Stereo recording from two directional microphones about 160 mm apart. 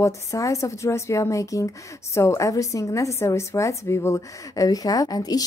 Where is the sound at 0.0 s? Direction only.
20° left (ahead or behind).